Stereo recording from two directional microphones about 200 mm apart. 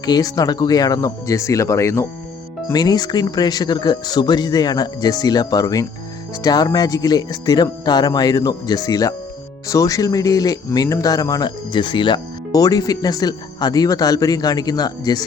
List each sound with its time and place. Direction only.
0.0 s speech: 20° left (ahead or behind)